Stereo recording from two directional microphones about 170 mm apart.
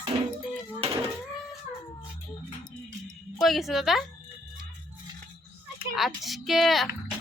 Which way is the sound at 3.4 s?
Centre (ahead or behind).